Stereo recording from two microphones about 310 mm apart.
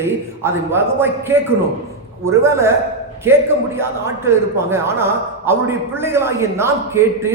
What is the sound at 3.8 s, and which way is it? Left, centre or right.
A man's voice, centre.